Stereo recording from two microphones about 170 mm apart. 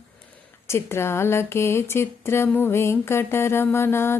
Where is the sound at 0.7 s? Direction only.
15° left (ahead or behind).